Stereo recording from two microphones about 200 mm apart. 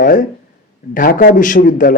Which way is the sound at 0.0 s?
40° left (ahead or behind).